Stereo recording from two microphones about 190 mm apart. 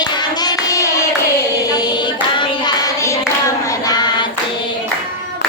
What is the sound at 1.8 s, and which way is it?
Hands, 20° left (ahead or behind).